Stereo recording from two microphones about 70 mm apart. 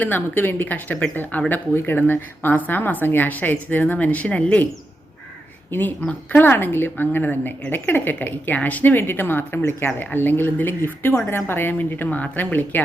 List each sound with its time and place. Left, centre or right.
0.0 s speech: left
5.7 s speech: left